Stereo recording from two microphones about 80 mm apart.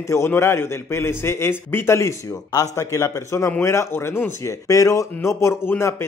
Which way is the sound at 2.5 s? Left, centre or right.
Left.